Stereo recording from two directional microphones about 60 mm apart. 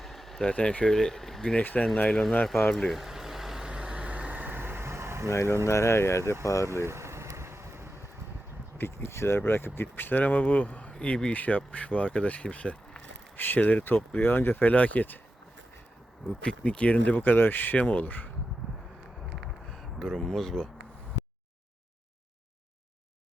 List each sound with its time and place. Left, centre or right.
0.0 s a sound: centre
0.5 s speech: centre
1.5 s speech: left
2.9 s vehicle: centre; by 5.3 s right
5.3 s speech: left
6.4 s speech: left
6.8 s vehicle: right
8.8 s speech: left
13.3 s speech: left
14.7 s speech: left
16.4 s speech: centre
17.3 s speech: left
19.7 s a sound: centre
20.3 s speech: centre